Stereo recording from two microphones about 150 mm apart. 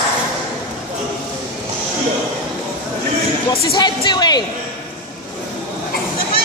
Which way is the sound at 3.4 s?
25° left (ahead or behind).